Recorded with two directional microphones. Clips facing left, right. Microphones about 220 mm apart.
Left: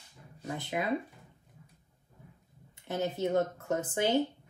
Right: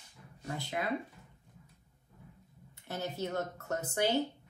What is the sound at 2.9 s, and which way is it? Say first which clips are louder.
Speech: left 6 dB; 20° left (ahead or behind).